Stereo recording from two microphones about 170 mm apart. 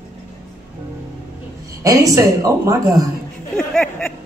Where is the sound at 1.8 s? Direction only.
20° right (ahead or behind).